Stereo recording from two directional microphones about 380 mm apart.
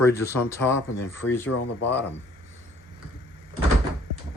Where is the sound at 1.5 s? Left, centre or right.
Left.